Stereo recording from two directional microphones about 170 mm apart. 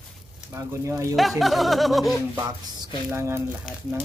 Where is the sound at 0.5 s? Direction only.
15° right (ahead or behind).